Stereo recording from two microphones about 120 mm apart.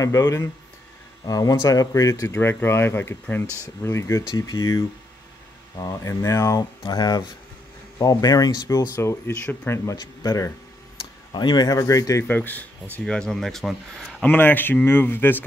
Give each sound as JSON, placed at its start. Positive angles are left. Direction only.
{"t": 0.0, "sound": "speech", "side_deg": 25}
{"t": 8.9, "sound": "speech", "side_deg": 20}
{"t": 12.3, "sound": "speech", "side_deg": 15}
{"t": 14.2, "sound": "speech", "side_deg": 15}